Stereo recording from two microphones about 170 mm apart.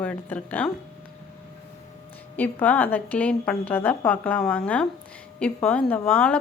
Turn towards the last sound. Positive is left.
turn(degrees=5)  # may be behind; listen again after turning